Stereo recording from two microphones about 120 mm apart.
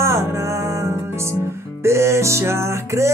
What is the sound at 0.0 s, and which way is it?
Music, 20° right (ahead or behind).